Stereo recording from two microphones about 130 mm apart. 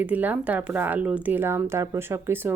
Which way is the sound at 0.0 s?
15° right (ahead or behind).